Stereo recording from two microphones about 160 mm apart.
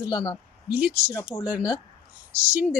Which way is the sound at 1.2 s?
25° left (ahead or behind).